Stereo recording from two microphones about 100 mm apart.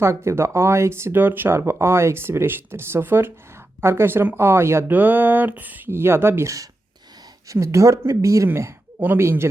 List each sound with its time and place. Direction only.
0.0 s a woman's voice: 25° right (ahead or behind)